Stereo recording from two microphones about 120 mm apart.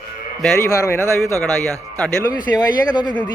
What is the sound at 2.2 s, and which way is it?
Speech, 30° left (ahead or behind).